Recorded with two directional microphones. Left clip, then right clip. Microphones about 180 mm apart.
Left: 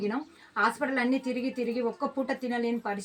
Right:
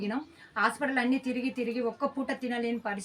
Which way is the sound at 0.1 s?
25° right (ahead or behind).